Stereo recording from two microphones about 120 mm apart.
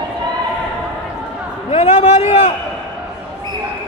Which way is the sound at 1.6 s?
55° left (ahead or behind).